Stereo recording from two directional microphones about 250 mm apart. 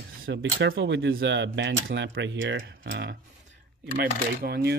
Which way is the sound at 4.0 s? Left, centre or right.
Right.